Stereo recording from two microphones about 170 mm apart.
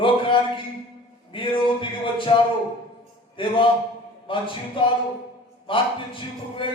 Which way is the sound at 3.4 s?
30° left (ahead or behind).